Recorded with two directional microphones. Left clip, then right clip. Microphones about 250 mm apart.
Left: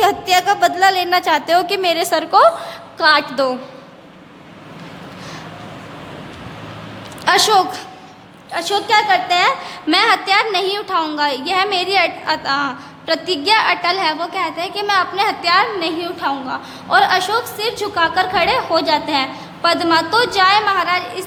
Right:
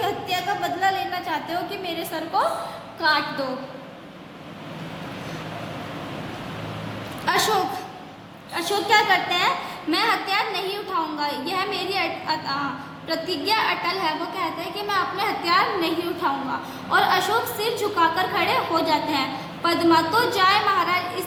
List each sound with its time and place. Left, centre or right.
0.0 s a woman's voice: left
7.3 s a woman's voice: left